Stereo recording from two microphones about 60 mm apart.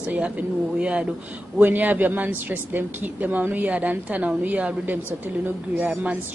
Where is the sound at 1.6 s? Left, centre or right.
Right.